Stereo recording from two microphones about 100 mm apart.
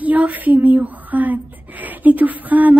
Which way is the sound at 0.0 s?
15° right (ahead or behind).